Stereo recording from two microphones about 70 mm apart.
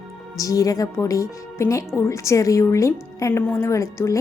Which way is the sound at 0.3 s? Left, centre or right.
Left.